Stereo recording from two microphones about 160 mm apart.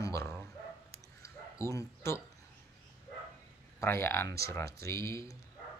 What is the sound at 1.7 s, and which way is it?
Speech, 15° left (ahead or behind).